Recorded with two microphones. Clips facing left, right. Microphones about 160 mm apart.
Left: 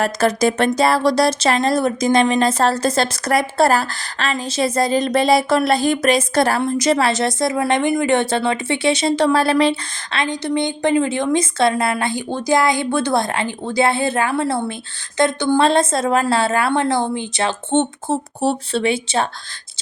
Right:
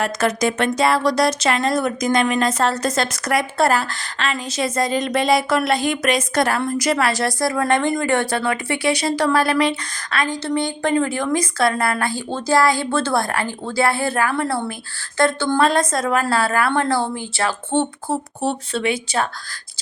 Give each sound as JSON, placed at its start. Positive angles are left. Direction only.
{"t": 0.0, "sound": "speech", "side_deg": 35}